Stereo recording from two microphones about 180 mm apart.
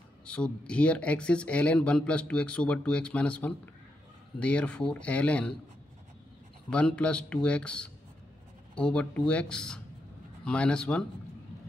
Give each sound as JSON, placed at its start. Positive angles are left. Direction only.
{"t": 0.2, "sound": "speech", "side_deg": 5}
{"t": 6.7, "sound": "speech", "side_deg": 5}